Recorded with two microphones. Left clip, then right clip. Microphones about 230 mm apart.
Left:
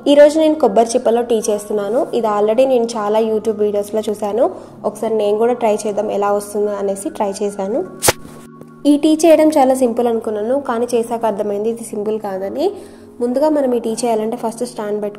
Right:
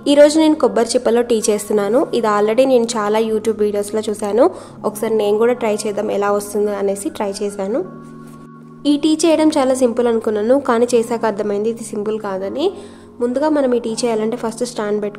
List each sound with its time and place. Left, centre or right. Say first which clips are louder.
0.0 s a woman's voice: left 1 dB; centre
0.7 s a woman's voice: left 3 dB; right
1.2 s a woman's voice: even; centre
8.8 s a woman's voice: left 3 dB; centre
10.8 s a woman's voice: right 2 dB; right
11.4 s a woman's voice: even; centre